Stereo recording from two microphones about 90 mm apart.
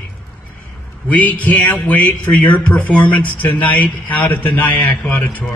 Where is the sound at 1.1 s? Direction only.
15° left (ahead or behind).